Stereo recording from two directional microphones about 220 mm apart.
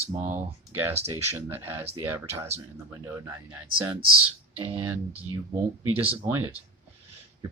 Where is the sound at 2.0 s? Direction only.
10° right (ahead or behind).